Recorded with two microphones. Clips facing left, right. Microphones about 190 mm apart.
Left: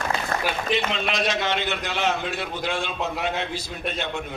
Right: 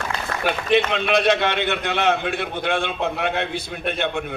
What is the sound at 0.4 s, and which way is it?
A man's voice, 60° right (ahead or behind).